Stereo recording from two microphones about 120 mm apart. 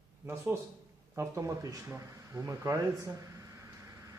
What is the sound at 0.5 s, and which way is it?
Speech, 20° right (ahead or behind).